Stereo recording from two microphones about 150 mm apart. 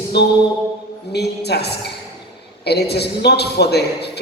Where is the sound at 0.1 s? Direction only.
90° left.